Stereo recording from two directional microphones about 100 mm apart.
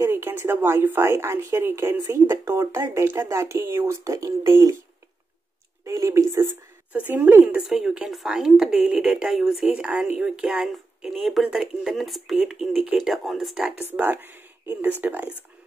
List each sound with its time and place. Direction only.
0.0 s a woman's voice: 25° right (ahead or behind)
5.9 s a woman's voice: 30° right (ahead or behind)
6.9 s a woman's voice: 15° right (ahead or behind)
7.6 s a woman's voice: 5° right (ahead or behind)
13.8 s a woman's voice: 20° right (ahead or behind)